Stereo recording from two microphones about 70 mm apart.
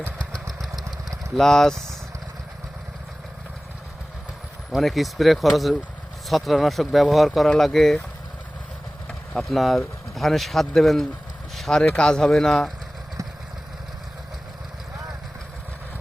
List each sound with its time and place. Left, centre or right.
0.3 s vehicle: centre
1.4 s speech: centre
4.7 s speech: centre
9.0 s speech: centre
11.5 s a sound: centre
11.8 s speech: centre